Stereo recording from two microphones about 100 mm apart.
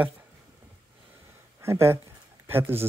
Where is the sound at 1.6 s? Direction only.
25° right (ahead or behind).